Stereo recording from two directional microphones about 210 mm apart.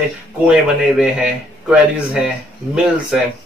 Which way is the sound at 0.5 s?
5° right (ahead or behind).